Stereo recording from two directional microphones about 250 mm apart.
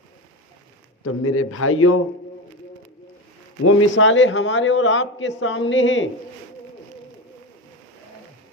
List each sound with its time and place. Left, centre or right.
1.0 s a man's voice: left
3.7 s a man's voice: left